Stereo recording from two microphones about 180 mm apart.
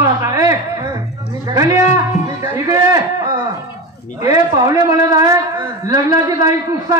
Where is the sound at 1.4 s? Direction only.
20° right (ahead or behind).